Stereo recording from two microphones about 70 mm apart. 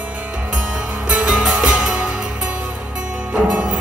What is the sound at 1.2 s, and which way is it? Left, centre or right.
Music, centre.